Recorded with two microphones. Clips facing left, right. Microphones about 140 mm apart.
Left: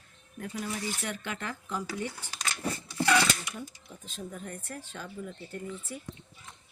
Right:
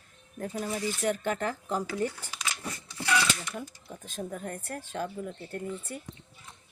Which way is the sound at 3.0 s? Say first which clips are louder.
Left 3 dB; 55° left (ahead or behind).